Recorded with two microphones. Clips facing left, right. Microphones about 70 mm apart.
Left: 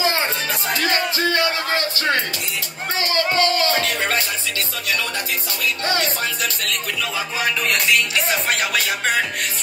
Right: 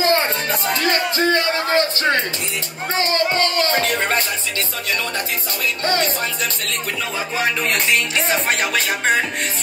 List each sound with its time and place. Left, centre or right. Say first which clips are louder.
0.0 s music: right 3 dB; right
5.9 s speech: right 3 dB; right